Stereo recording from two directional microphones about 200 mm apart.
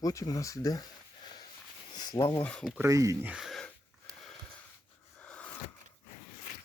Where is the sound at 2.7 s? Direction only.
15° right (ahead or behind).